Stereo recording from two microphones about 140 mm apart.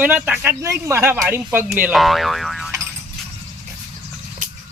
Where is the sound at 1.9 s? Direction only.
Centre (ahead or behind).